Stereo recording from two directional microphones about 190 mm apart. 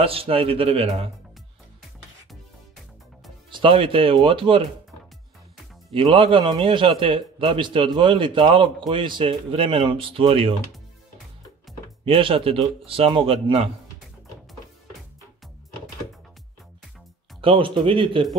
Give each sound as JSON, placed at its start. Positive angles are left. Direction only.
{"t": 0.0, "sound": "a man's voice", "side_deg": -30}
{"t": 3.4, "sound": "a man's voice", "side_deg": -25}
{"t": 5.9, "sound": "a man's voice", "side_deg": -30}
{"t": 12.0, "sound": "a man's voice", "side_deg": -30}
{"t": 17.4, "sound": "a man's voice", "side_deg": -25}